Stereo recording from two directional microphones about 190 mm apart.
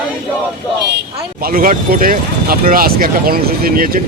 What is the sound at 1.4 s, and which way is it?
Speech, 50° right (ahead or behind).